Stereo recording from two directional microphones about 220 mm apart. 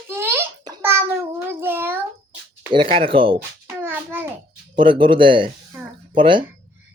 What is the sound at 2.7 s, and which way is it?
Speech, 25° right (ahead or behind).